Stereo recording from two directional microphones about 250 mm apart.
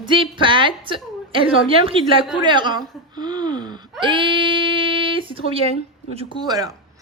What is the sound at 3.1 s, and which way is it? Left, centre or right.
Gasp, centre.